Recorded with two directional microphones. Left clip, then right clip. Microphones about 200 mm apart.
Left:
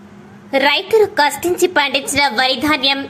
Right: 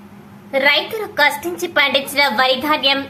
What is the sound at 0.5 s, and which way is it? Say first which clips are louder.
A woman's voice: left 3 dB; 20° left (ahead or behind).